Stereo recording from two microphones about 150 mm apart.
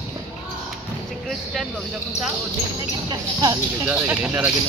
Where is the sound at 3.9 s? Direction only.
10° right (ahead or behind).